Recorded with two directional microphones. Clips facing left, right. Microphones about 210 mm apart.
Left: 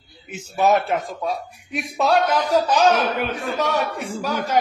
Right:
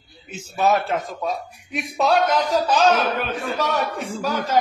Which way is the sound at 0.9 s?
5° left (ahead or behind).